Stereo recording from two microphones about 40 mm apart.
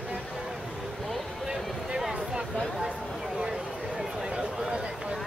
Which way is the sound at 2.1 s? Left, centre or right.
Right.